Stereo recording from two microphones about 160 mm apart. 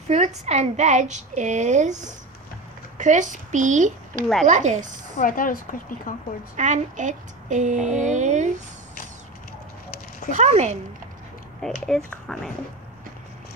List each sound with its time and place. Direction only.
0.1 s a woman's voice: 45° right (ahead or behind)
5.1 s a woman's voice: 60° left (ahead or behind)
6.5 s a woman's voice: 50° right (ahead or behind)
10.3 s a woman's voice: 45° right (ahead or behind)
11.8 s speech: 5° left (ahead or behind)